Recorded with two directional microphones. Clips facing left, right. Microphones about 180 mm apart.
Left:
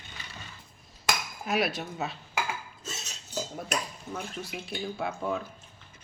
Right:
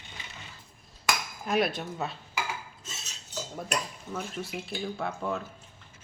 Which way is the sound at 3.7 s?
Centre (ahead or behind).